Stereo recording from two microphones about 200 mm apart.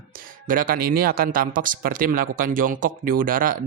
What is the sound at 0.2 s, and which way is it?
Speech, 45° right (ahead or behind).